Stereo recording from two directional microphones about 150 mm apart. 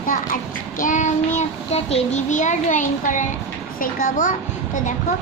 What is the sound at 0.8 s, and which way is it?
A child's voice, 55° left (ahead or behind).